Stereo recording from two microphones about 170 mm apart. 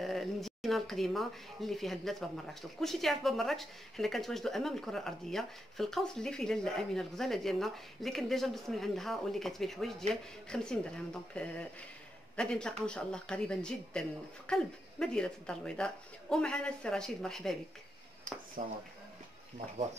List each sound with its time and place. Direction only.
0.0 s speech: centre (ahead or behind)
18.6 s speech: 50° right (ahead or behind)